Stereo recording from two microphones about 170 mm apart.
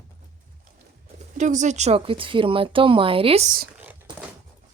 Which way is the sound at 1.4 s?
45° right (ahead or behind).